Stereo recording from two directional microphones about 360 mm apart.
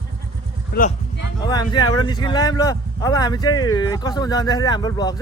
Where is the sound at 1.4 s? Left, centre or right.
Centre.